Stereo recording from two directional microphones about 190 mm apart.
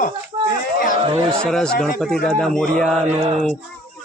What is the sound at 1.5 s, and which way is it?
A man's voice, 5° left (ahead or behind).